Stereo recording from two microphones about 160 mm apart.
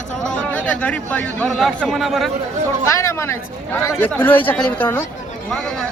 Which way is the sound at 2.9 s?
15° left (ahead or behind).